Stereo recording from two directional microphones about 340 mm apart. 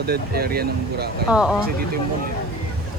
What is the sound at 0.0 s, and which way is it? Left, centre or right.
Speech, right.